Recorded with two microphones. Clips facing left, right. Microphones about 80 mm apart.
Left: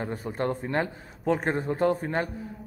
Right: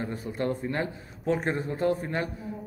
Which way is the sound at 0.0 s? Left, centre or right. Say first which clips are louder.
Left 1 dB; left.